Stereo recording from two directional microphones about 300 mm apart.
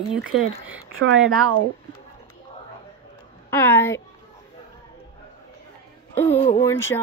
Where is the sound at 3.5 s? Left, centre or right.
Centre.